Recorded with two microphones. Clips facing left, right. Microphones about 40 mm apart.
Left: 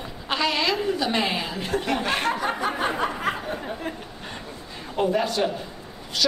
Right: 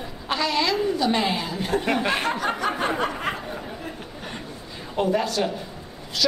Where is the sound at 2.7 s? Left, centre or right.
Centre.